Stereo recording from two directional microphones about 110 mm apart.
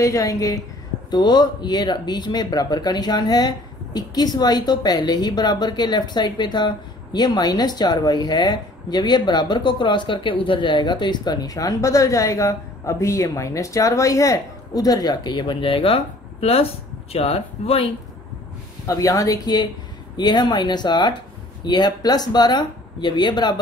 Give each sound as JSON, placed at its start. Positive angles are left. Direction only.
{"t": 0.0, "sound": "a woman's voice", "side_deg": 30}
{"t": 1.1, "sound": "a woman's voice", "side_deg": 40}
{"t": 18.9, "sound": "a woman's voice", "side_deg": 30}